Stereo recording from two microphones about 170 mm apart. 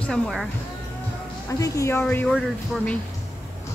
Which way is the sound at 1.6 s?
15° left (ahead or behind).